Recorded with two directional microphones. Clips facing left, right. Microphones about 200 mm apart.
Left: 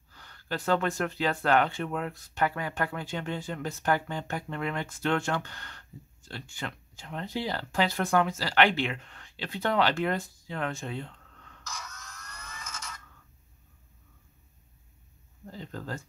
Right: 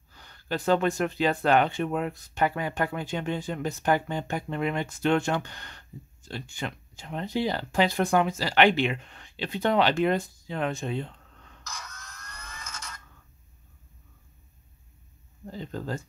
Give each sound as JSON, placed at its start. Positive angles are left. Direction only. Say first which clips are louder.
{"t": 0.1, "sound": "speech", "louder": "right 3 dB", "side_deg": -20}
{"t": 11.6, "sound": "wood", "louder": "even", "side_deg": 0}
{"t": 15.4, "sound": "a sound", "louder": "right 5 dB", "side_deg": -20}